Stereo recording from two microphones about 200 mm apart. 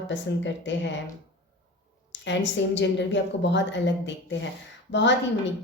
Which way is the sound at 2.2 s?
65° left (ahead or behind).